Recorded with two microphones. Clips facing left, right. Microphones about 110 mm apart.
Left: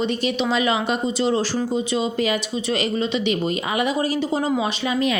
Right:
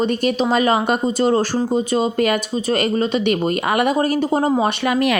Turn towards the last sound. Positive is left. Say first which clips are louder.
# right 4 dB
turn(degrees=-65)  # may be behind; listen again after turning